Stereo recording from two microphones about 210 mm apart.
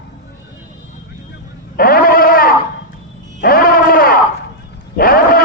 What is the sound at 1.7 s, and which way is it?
Sheep, 45° left (ahead or behind).